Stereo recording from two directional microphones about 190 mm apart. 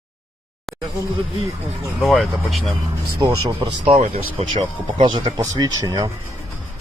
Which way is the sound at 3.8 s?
35° right (ahead or behind).